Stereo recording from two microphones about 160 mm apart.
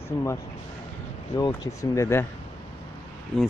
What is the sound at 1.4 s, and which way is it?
Speech, 25° left (ahead or behind).